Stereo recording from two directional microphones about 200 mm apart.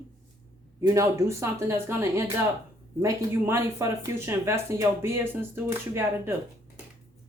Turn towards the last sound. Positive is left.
turn(degrees=-10)  # may be behind; listen again after turning